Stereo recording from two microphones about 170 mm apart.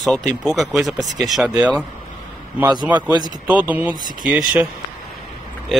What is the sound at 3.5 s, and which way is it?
Speech, 10° right (ahead or behind).